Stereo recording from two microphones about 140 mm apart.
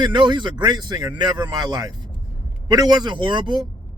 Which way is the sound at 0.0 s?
35° right (ahead or behind).